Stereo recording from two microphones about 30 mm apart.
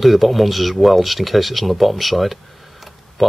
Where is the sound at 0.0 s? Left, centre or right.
Centre.